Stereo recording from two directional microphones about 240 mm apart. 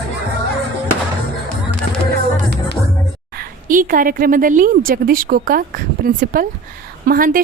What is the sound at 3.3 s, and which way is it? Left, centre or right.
A woman's voice, right.